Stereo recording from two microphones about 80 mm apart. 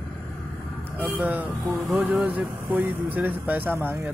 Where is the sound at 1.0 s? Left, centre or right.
Right.